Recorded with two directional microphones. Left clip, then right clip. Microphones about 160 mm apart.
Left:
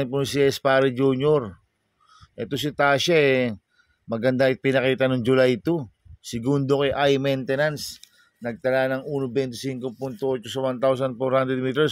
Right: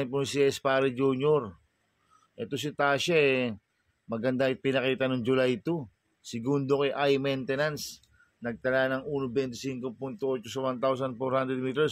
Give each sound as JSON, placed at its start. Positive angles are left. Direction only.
{"t": 0.0, "sound": "speech", "side_deg": 45}